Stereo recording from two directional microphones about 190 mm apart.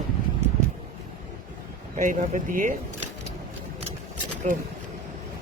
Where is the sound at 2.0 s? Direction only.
45° right (ahead or behind).